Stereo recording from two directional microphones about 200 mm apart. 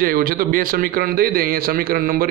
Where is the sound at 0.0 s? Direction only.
45° right (ahead or behind).